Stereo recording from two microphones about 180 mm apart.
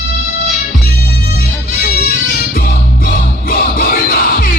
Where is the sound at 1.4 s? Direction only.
50° left (ahead or behind).